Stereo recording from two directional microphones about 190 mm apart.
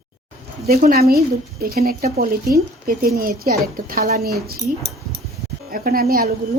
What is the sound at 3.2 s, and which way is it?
Speech, 50° right (ahead or behind).